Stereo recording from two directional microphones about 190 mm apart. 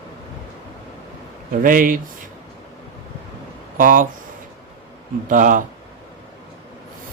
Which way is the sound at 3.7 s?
45° right (ahead or behind).